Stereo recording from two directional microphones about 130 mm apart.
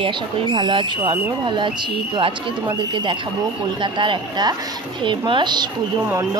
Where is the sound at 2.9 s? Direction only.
35° right (ahead or behind).